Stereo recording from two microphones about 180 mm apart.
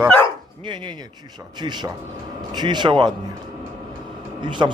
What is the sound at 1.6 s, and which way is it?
Speech, 25° right (ahead or behind).